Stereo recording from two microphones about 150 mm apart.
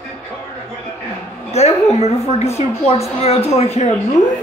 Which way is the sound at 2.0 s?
45° left (ahead or behind).